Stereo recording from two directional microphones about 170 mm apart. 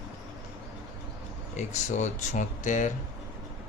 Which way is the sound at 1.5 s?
45° left (ahead or behind).